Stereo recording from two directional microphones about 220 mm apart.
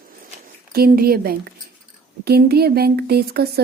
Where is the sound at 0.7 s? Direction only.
45° right (ahead or behind).